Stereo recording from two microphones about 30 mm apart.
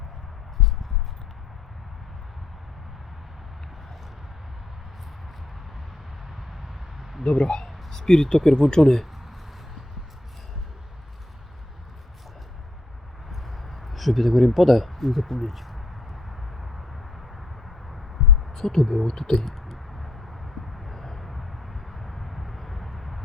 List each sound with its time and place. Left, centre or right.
7.3 s speech: left
7.6 s speech: centre
13.3 s speech: centre
18.5 s speech: centre
19.5 s a sound: centre
21.2 s vehicle: centre